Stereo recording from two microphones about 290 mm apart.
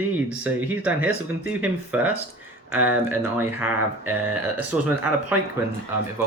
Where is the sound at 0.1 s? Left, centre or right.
Centre.